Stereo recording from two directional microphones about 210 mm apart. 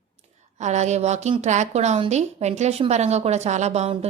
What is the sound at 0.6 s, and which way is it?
A woman's voice, 35° right (ahead or behind).